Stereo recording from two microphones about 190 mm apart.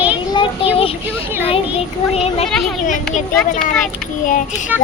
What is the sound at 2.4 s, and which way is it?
Speech, centre (ahead or behind).